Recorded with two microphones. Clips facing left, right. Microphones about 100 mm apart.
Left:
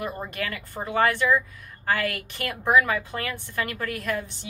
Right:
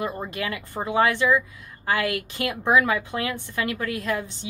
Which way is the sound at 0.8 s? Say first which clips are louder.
Right 1 dB; 20° right (ahead or behind).